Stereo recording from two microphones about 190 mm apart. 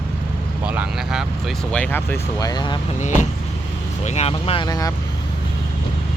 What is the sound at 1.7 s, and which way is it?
Speech, 10° left (ahead or behind).